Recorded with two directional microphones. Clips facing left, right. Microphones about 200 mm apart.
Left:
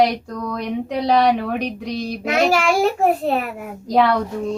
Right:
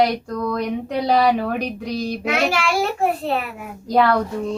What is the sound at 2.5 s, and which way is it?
Speech, 45° left (ahead or behind).